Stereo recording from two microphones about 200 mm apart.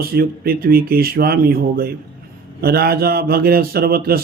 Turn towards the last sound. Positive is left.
turn(degrees=-50)  # may be behind; listen again after turning